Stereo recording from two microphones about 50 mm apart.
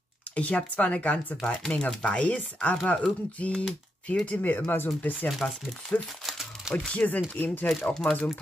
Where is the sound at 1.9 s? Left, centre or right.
Centre.